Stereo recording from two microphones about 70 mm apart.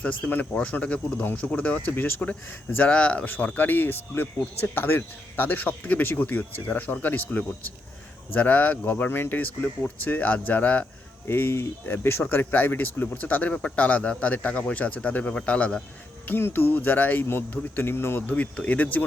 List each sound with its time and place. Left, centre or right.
0.0 s speech: left
11.3 s speech: left
18.3 s speech: centre